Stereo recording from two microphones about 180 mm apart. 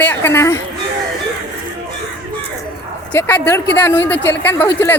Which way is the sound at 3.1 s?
10° left (ahead or behind).